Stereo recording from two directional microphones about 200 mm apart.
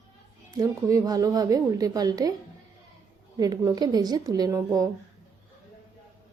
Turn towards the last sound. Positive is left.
turn(degrees=-15)  # may be behind; listen again after turning